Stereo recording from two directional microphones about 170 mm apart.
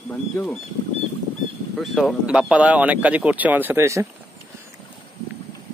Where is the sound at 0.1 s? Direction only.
5° left (ahead or behind).